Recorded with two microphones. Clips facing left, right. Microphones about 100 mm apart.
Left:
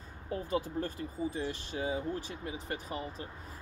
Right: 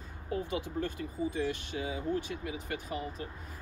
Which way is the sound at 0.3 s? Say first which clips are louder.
Left 1 dB; 35° left (ahead or behind).